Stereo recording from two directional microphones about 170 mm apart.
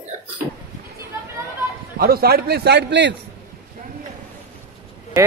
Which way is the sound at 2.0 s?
65° right (ahead or behind).